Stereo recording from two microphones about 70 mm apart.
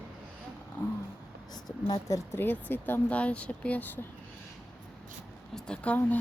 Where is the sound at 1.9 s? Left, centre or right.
Left.